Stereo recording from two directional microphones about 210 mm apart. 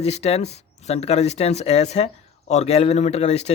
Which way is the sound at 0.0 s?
30° left (ahead or behind).